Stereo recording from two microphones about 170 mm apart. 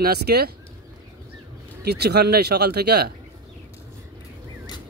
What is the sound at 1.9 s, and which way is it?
Speech, 70° right (ahead or behind).